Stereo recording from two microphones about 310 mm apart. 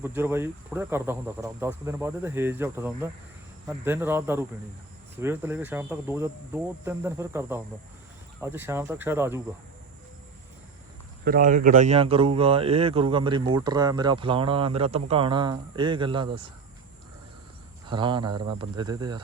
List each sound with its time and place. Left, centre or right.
0.0 s a man's voice: centre
11.3 s a man's voice: right
17.8 s a man's voice: centre